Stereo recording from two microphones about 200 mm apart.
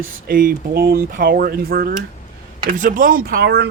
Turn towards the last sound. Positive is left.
turn(degrees=-55)  # may be behind; listen again after turning